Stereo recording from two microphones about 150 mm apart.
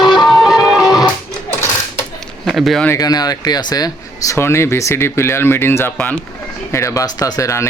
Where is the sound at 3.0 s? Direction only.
25° left (ahead or behind).